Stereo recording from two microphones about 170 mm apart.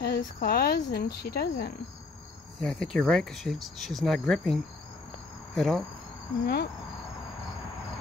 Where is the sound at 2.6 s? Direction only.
5° left (ahead or behind).